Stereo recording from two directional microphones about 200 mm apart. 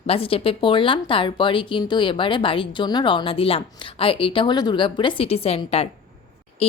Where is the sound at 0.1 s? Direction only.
30° left (ahead or behind).